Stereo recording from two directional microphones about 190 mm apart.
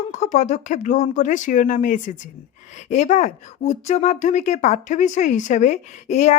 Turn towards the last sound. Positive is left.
turn(degrees=35)  # may be behind; listen again after turning